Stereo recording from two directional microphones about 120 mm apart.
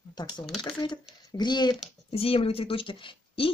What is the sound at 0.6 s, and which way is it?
Speech, 40° left (ahead or behind).